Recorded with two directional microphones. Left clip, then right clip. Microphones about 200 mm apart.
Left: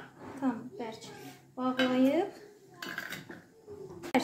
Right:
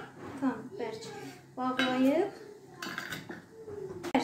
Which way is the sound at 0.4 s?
40° left (ahead or behind).